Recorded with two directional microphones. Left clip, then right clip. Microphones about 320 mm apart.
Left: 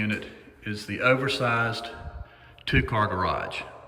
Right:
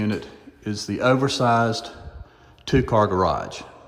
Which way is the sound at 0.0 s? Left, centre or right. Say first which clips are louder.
Right 2 dB; centre.